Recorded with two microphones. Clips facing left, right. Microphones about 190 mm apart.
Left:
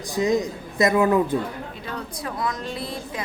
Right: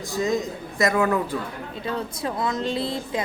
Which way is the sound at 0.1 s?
20° left (ahead or behind).